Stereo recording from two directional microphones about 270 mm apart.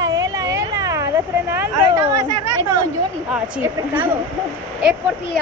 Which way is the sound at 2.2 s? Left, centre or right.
Right.